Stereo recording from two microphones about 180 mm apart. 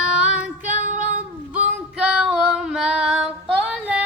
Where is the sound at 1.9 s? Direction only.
5° right (ahead or behind).